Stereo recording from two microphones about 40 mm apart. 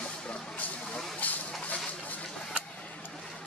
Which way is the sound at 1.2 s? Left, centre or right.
Left.